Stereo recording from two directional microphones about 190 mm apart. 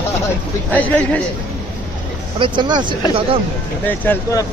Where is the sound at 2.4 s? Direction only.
25° right (ahead or behind).